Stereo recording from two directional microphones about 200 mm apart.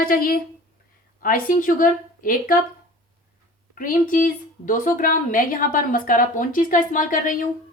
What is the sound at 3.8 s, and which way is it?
A woman's voice, 45° left (ahead or behind).